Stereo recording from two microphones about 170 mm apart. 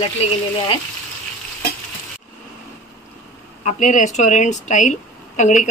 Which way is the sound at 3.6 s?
45° left (ahead or behind).